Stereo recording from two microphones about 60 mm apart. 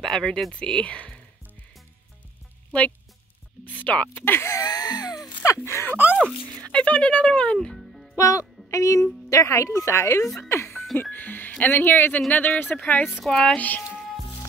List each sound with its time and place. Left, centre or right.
0.0 s speech: centre
3.6 s speech: left
4.2 s speech: left
4.6 s a sound: left
5.6 s speech: left
6.7 s speech: centre
7.7 s music: centre
8.2 s speech: left
10.2 s speech: centre
10.5 s music: left
11.0 s speech: left
13.3 s speech: centre
13.6 s speech: left